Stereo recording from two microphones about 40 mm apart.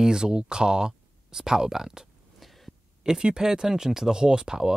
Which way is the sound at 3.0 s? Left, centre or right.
Centre.